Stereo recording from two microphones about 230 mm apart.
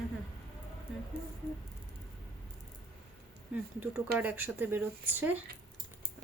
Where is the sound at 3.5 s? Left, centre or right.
Centre.